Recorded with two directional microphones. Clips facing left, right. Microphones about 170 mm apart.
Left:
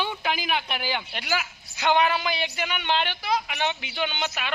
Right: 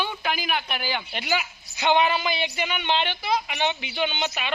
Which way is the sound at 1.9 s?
5° left (ahead or behind).